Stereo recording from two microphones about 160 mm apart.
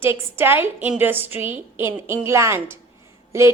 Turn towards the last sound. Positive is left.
turn(degrees=-15)  # may be behind; listen again after turning